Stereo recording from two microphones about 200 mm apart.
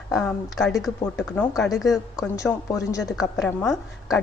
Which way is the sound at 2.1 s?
15° left (ahead or behind).